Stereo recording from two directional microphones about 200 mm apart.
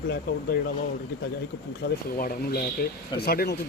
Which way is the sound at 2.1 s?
45° left (ahead or behind).